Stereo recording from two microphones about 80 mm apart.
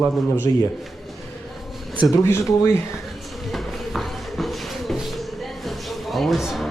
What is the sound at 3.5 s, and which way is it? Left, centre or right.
Shuffle, centre.